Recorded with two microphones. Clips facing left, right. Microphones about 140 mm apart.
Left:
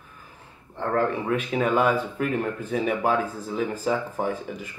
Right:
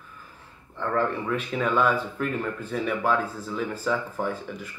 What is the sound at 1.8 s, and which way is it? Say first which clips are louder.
Speech: left 2 dB; 60° left (ahead or behind).